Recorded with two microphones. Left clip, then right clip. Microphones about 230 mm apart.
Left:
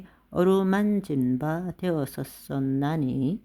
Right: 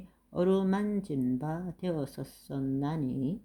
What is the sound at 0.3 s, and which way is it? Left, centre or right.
Speech, left.